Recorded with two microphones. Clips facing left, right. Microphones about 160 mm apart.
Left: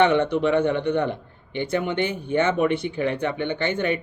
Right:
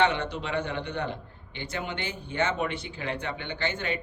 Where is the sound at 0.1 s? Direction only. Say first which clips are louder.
Left 11 dB; 60° left (ahead or behind).